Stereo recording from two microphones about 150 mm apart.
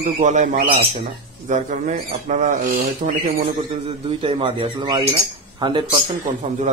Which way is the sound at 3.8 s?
40° right (ahead or behind).